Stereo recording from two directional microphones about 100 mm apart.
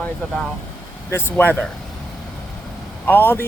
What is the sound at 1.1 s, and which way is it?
Speech, 20° left (ahead or behind).